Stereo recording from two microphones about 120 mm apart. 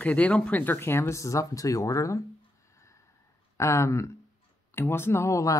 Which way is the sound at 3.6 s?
25° left (ahead or behind).